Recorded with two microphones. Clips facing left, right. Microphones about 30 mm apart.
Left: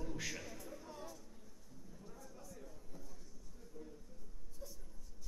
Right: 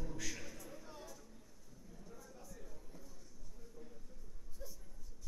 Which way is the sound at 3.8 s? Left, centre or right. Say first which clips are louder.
Left 4 dB; centre.